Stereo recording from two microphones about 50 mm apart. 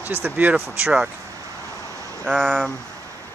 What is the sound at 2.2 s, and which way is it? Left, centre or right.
Speech, centre.